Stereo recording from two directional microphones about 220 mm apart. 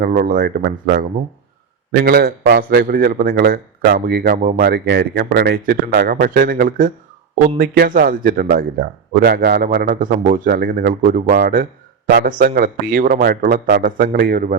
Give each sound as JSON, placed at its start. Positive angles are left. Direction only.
{"t": 0.0, "sound": "a man's voice", "side_deg": -40}